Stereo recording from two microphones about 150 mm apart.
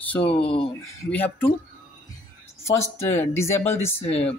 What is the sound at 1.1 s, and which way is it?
Speech, 10° left (ahead or behind).